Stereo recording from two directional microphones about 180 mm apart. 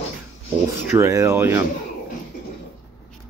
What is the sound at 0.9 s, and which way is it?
Speech, 15° right (ahead or behind).